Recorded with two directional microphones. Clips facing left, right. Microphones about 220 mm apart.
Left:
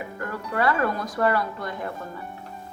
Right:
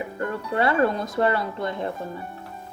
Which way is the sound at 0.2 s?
25° right (ahead or behind).